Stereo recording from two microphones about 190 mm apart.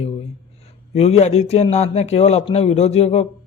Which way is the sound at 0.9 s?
30° left (ahead or behind).